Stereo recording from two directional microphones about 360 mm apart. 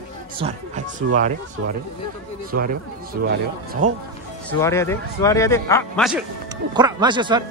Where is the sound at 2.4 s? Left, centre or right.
Right.